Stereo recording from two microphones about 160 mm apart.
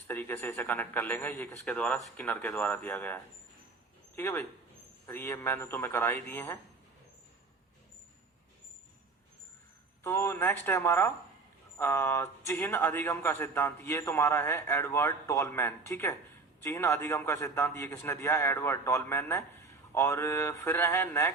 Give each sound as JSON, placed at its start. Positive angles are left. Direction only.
{"t": 0.1, "sound": "a man's voice", "side_deg": 10}
{"t": 10.0, "sound": "a man's voice", "side_deg": 15}